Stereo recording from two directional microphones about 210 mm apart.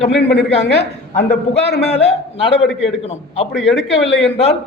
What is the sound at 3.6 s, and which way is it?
Speech, 55° left (ahead or behind).